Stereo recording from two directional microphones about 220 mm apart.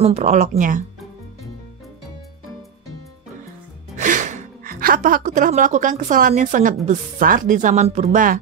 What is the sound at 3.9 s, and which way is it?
Speech, 35° right (ahead or behind).